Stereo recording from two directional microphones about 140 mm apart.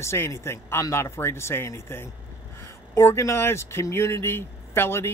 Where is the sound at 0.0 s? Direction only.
20° left (ahead or behind).